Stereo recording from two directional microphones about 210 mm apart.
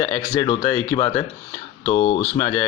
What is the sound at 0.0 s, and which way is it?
Speech, 25° left (ahead or behind).